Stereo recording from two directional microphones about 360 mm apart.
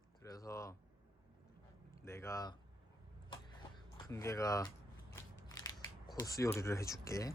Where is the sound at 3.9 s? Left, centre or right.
Centre.